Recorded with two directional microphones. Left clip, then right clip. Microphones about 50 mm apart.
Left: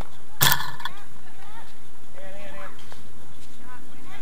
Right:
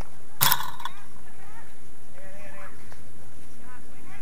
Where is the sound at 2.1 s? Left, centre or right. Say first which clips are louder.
Left 5 dB; left.